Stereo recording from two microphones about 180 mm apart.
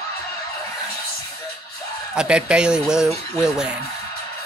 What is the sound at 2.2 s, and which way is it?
A man's voice, 5° right (ahead or behind).